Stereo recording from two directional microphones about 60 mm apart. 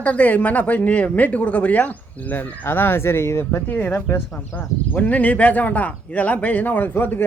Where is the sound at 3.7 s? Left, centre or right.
Left.